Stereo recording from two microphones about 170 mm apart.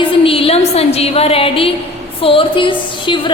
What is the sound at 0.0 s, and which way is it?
A woman's voice, 30° left (ahead or behind).